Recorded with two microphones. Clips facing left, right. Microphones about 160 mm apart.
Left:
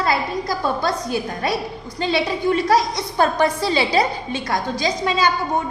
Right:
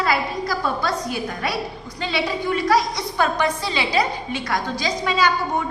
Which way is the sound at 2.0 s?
30° left (ahead or behind).